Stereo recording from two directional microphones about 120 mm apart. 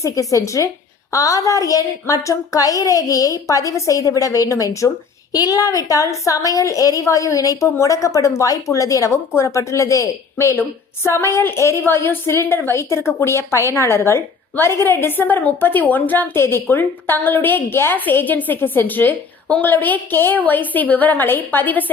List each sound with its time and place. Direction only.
0.0 s a woman's voice: 30° left (ahead or behind)